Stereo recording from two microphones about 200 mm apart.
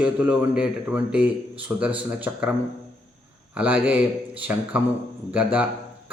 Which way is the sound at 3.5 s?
10° right (ahead or behind).